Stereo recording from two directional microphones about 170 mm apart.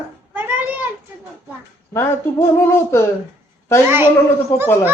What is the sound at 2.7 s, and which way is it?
Speech, 15° left (ahead or behind).